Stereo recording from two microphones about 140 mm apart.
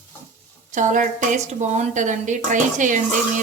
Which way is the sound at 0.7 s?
65° right (ahead or behind).